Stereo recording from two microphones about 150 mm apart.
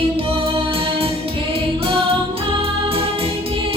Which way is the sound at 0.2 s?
40° right (ahead or behind).